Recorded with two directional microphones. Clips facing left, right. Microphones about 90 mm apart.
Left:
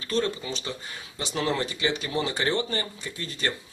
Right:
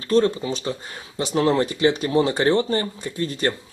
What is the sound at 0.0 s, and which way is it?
Speech, 35° right (ahead or behind).